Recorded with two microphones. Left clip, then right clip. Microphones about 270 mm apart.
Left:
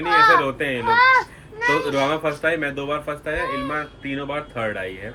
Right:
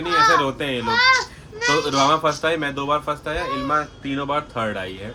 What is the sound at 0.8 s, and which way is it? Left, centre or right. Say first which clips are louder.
Speech: left 3 dB; left.